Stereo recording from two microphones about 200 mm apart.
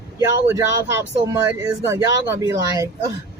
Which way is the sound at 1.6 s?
15° right (ahead or behind).